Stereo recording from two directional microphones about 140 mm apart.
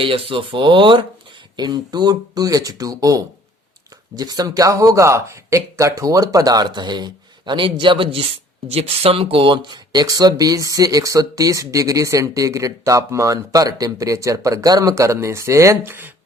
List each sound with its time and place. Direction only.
0.0 s speech: 40° right (ahead or behind); by 16.1 s 15° right (ahead or behind)